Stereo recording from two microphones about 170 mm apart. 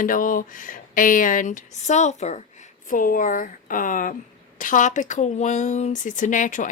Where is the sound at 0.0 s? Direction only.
55° left (ahead or behind).